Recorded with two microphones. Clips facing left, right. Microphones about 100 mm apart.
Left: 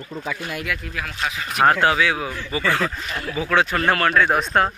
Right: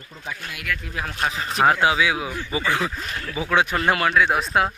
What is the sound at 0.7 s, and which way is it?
Speech, 10° left (ahead or behind).